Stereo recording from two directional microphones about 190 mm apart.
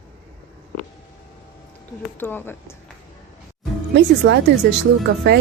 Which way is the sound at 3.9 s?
65° right (ahead or behind).